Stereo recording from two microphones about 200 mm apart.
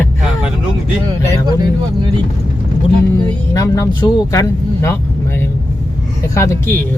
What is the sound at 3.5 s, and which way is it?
Speech, 15° left (ahead or behind).